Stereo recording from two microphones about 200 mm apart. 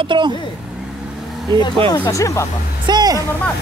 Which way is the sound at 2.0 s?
15° left (ahead or behind).